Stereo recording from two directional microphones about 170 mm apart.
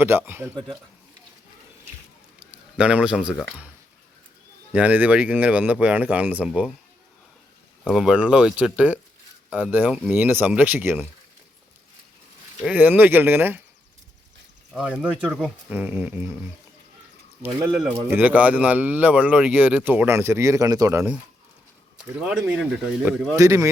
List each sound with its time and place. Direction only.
0.0 s speech: 15° right (ahead or behind)
2.4 s speech: 5° right (ahead or behind)
4.7 s speech: 10° right (ahead or behind)
7.9 s speech: 5° right (ahead or behind)
12.6 s speech: 10° right (ahead or behind)
14.7 s speech: 5° right (ahead or behind)
22.2 s speech: 5° right (ahead or behind)
23.3 s speech: 15° right (ahead or behind)